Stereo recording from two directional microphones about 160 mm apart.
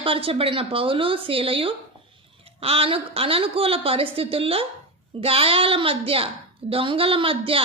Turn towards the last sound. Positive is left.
turn(degrees=-35)  # may be behind; listen again after turning